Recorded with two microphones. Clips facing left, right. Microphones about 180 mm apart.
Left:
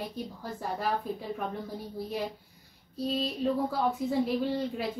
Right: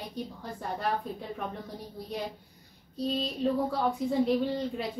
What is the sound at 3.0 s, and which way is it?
A woman's voice, 5° left (ahead or behind).